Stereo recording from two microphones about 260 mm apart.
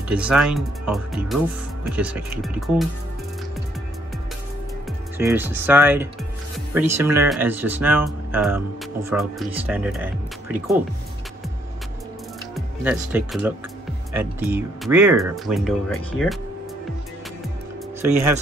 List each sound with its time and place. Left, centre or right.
0.1 s speech: centre
5.1 s speech: centre
12.5 s speech: centre
18.0 s speech: centre